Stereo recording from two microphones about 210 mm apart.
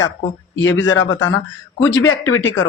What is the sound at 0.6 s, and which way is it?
Speech, 60° left (ahead or behind).